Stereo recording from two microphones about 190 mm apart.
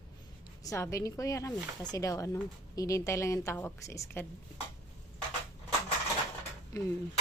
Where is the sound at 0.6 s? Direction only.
15° left (ahead or behind).